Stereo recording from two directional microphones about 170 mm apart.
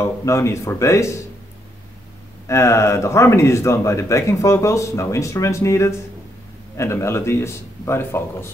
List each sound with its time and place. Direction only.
0.0 s speech: 15° left (ahead or behind)
2.4 s speech: 15° left (ahead or behind)